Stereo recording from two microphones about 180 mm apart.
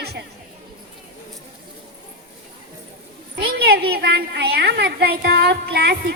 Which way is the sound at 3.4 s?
60° right (ahead or behind).